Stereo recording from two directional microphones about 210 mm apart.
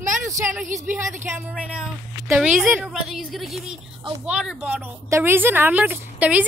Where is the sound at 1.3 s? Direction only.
5° right (ahead or behind).